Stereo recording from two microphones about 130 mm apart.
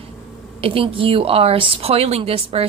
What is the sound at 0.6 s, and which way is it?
A woman's voice, 45° right (ahead or behind).